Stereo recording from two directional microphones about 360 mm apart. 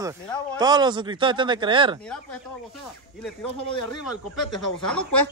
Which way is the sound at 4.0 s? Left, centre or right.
Left.